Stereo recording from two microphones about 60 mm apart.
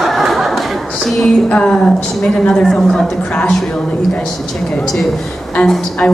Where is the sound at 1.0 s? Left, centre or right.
Centre.